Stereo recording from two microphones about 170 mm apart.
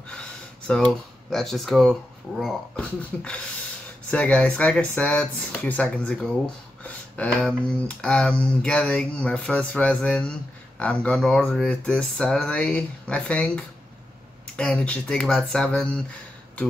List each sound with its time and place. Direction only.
0.1 s speech: 5° left (ahead or behind)